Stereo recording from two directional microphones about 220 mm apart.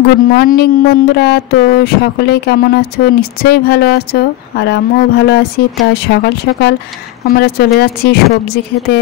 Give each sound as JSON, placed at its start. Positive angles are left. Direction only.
{"t": 0.4, "sound": "speech", "side_deg": 45}